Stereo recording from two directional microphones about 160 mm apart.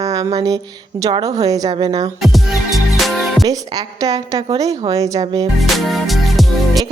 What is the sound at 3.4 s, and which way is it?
A woman's voice, 25° right (ahead or behind).